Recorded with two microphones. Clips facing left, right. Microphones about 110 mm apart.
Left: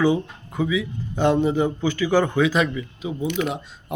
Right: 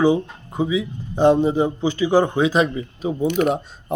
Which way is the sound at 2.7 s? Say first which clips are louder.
Right 4 dB; 40° right (ahead or behind).